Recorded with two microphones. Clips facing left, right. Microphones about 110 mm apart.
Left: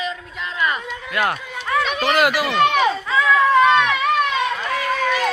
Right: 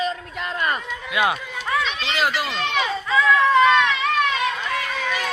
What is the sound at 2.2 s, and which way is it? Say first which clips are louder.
Run: left 7 dB; 70° left (ahead or behind).